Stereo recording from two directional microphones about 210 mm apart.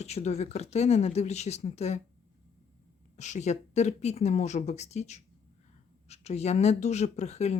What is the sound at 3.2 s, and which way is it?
Speech, 35° left (ahead or behind).